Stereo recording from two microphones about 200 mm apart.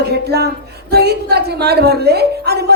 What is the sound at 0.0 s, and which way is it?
A woman's voice, 55° right (ahead or behind).